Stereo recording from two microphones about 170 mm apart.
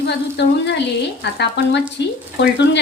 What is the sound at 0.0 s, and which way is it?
Speech, 90° left.